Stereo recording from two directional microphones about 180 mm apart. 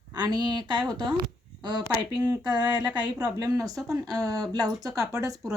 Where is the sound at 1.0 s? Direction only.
25° right (ahead or behind).